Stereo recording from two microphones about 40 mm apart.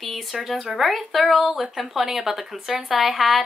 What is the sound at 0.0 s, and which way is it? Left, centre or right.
Speech, centre.